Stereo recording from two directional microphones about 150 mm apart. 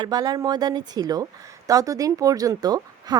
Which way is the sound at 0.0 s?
30° right (ahead or behind).